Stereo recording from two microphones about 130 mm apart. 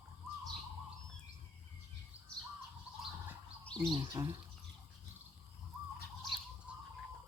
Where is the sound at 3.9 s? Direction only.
35° right (ahead or behind).